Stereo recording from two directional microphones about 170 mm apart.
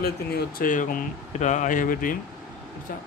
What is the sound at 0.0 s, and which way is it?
Speech, 60° left (ahead or behind).